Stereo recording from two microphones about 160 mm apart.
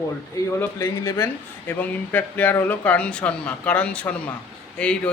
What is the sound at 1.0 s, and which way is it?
A man's voice, 20° left (ahead or behind).